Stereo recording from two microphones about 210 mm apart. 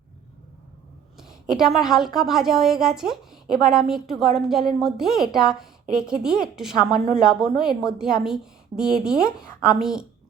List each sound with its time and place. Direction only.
1.5 s a woman's voice: centre (ahead or behind)